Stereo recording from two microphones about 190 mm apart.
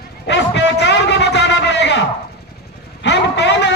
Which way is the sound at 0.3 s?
65° left (ahead or behind).